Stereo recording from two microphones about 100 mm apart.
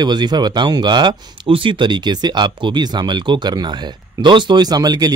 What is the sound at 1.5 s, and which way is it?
Speech, 60° right (ahead or behind).